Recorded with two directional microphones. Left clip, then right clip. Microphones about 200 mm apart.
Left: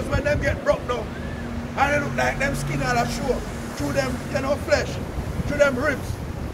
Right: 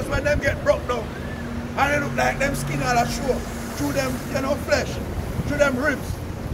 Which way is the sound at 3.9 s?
35° left (ahead or behind).